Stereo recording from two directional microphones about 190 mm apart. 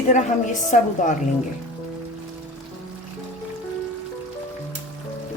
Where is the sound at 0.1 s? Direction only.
40° left (ahead or behind).